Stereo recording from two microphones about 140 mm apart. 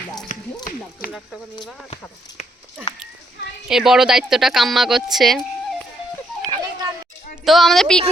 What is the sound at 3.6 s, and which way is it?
A woman's voice, 5° right (ahead or behind).